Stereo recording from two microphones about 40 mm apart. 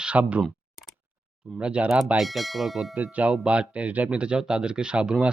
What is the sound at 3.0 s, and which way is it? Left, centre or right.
Speech, right.